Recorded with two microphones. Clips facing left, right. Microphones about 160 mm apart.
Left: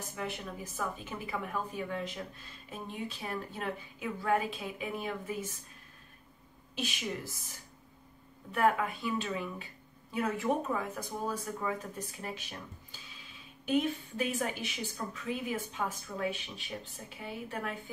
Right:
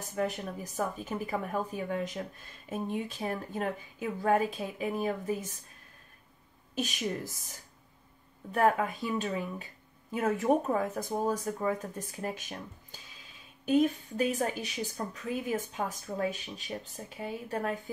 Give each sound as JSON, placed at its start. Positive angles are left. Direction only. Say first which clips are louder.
{"t": 0.1, "sound": "speech", "louder": "right 8 dB", "side_deg": -45}
{"t": 6.7, "sound": "a woman's voice", "louder": "right 4 dB", "side_deg": -45}
{"t": 8.5, "sound": "a woman's voice", "louder": "right 2 dB", "side_deg": -40}